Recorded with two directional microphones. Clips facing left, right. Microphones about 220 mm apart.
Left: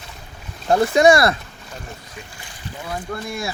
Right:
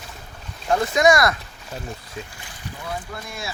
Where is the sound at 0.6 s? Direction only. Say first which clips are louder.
Left 4 dB; 30° left (ahead or behind).